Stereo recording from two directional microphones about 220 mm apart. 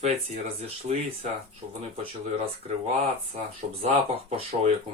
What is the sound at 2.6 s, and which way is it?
Speech, 30° right (ahead or behind).